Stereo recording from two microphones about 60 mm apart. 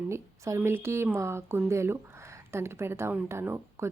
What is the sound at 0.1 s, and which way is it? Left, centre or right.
A woman's voice, right.